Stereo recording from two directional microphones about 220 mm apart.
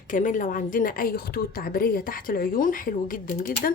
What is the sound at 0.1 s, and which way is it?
A woman's voice, 35° left (ahead or behind).